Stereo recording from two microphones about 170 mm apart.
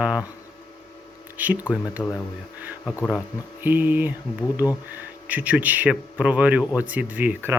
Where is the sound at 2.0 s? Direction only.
10° left (ahead or behind).